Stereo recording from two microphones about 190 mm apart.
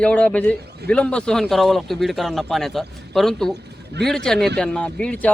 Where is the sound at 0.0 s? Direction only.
5° left (ahead or behind).